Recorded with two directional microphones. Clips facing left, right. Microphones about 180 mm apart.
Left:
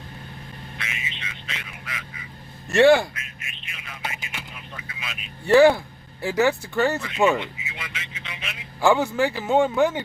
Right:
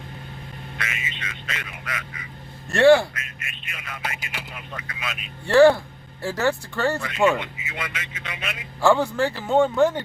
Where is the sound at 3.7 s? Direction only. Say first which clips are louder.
Right 2 dB; 55° right (ahead or behind).